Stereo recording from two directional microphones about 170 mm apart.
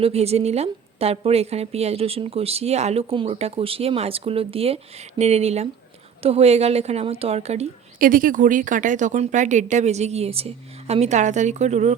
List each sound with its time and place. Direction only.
0.0 s a woman's voice: 35° right (ahead or behind)
7.9 s speech: 55° right (ahead or behind)